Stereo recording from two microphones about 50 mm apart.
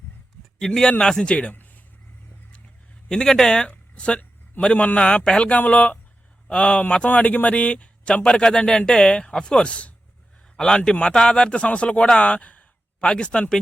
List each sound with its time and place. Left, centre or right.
0.6 s speech: centre
1.5 s a sound: left
3.1 s speech: centre
5.5 s speech: left
6.5 s speech: centre
13.0 s speech: centre